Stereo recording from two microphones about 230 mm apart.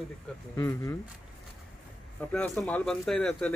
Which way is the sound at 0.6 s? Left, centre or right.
Centre.